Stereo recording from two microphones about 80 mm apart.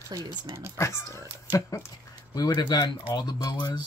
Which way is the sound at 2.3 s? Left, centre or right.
Left.